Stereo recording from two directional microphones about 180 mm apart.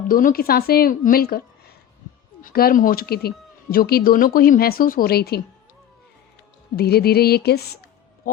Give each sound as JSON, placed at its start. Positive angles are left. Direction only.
{"t": 0.1, "sound": "speech", "side_deg": 50}
{"t": 6.7, "sound": "a woman's voice", "side_deg": 60}